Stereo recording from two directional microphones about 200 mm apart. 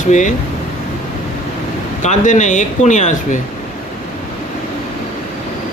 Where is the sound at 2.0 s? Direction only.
40° left (ahead or behind).